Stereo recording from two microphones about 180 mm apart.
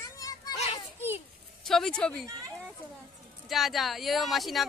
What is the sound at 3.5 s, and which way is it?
Speech, centre (ahead or behind).